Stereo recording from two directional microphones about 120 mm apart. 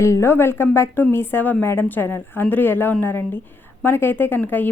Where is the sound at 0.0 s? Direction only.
20° left (ahead or behind).